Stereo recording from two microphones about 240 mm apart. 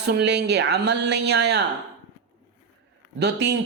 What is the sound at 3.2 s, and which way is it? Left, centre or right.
Speech, right.